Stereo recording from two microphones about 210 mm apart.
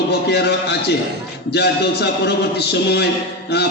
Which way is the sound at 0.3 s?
50° left (ahead or behind).